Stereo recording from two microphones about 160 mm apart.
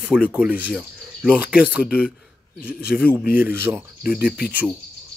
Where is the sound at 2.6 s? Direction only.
70° left (ahead or behind).